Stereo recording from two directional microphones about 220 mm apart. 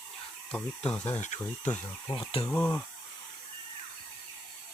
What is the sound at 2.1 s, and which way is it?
Speech, 25° left (ahead or behind).